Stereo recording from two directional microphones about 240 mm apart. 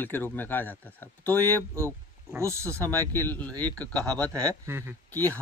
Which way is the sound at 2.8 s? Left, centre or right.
Centre.